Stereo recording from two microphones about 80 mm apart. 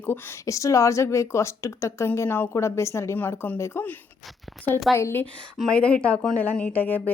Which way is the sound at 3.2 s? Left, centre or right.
Left.